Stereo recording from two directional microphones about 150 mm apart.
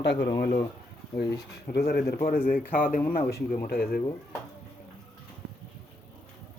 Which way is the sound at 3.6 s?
90° left.